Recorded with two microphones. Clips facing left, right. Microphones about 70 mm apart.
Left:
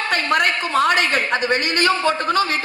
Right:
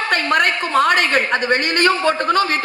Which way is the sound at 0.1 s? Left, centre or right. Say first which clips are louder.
Right 2 dB; right.